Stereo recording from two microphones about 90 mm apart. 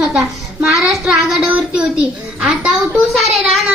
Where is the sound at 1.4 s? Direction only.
15° right (ahead or behind).